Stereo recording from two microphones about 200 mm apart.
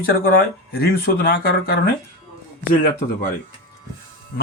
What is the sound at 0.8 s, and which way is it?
Speech, 50° left (ahead or behind).